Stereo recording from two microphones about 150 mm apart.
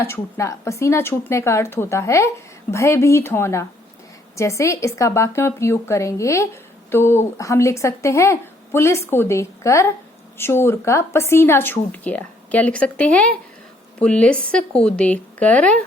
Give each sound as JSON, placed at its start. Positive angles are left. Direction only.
{"t": 0.0, "sound": "a woman's voice", "side_deg": 20}